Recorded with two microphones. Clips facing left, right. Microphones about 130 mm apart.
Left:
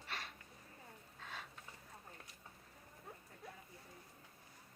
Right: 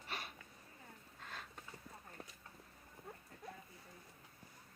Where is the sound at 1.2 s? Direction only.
Centre (ahead or behind).